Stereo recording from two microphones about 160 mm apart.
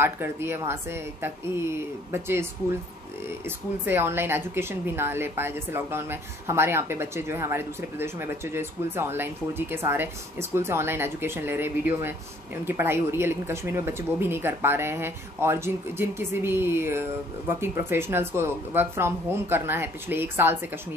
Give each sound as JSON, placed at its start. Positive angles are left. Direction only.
{"t": 0.0, "sound": "speech", "side_deg": -15}